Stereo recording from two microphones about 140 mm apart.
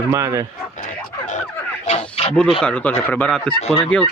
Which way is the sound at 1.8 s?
50° left (ahead or behind).